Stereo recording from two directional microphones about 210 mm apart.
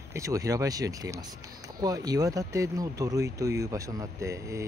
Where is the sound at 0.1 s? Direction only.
15° right (ahead or behind).